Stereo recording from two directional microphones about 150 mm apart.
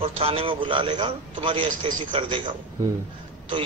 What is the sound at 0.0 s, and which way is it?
A man's voice, 40° right (ahead or behind).